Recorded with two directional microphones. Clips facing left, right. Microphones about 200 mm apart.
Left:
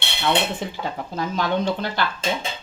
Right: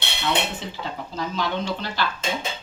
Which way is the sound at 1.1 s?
50° left (ahead or behind).